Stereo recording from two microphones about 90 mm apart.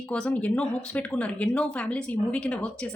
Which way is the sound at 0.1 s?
15° left (ahead or behind).